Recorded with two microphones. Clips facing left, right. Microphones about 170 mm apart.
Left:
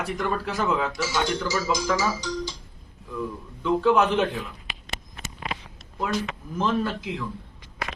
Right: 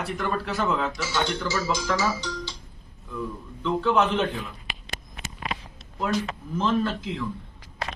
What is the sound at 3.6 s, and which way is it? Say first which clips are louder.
Speech: left 3 dB; 10° left (ahead or behind).